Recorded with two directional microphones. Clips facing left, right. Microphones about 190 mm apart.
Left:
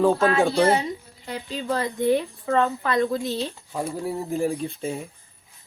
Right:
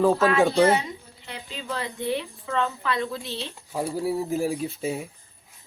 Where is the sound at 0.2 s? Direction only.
30° left (ahead or behind).